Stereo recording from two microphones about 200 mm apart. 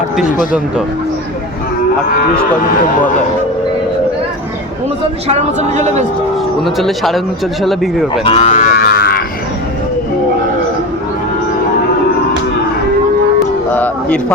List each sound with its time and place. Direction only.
5.3 s a woman's voice: 35° right (ahead or behind)
6.7 s speech: centre (ahead or behind)
8.2 s speech: 30° left (ahead or behind)
8.5 s moo: 45° left (ahead or behind)
13.7 s a sound: 5° left (ahead or behind)